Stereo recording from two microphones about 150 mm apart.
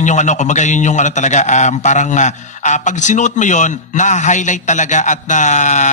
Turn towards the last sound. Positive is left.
turn(degrees=55)  # may be behind; listen again after turning